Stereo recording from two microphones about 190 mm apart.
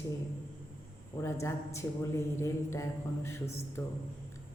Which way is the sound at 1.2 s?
15° left (ahead or behind).